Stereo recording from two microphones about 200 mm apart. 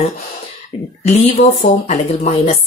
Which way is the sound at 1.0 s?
35° left (ahead or behind).